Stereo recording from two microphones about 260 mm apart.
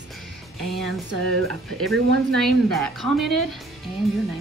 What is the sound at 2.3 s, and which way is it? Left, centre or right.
A woman's voice, centre.